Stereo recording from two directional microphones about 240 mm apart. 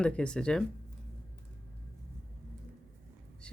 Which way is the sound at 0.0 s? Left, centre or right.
Centre.